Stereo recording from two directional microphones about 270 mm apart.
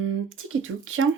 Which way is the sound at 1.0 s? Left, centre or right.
Right.